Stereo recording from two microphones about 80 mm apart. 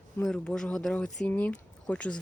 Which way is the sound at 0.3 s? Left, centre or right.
Centre.